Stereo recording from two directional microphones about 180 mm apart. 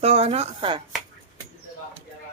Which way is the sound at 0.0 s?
35° right (ahead or behind).